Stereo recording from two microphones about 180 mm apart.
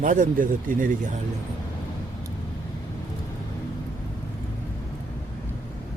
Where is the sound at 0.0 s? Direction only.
50° right (ahead or behind).